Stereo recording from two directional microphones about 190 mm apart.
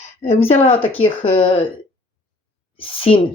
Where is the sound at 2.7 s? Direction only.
30° left (ahead or behind).